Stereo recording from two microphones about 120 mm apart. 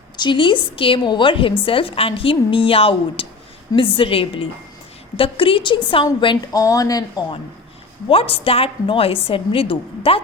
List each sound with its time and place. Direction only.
0.2 s a woman's voice: 40° left (ahead or behind)
8.1 s a woman's voice: 50° left (ahead or behind)